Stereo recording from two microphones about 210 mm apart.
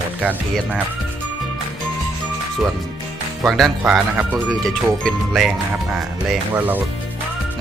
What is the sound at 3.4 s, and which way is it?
Speech, centre (ahead or behind).